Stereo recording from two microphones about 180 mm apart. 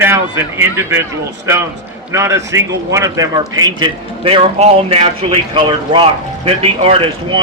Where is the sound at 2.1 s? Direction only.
15° right (ahead or behind).